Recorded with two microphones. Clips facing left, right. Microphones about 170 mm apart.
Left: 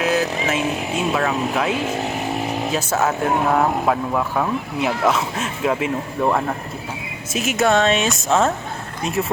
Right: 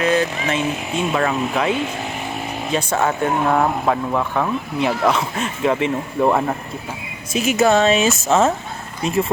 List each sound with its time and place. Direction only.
0.0 s speech: 5° left (ahead or behind)